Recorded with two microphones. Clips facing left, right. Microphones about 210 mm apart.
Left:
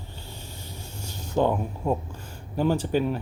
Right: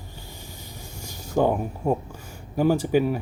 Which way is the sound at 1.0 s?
10° right (ahead or behind).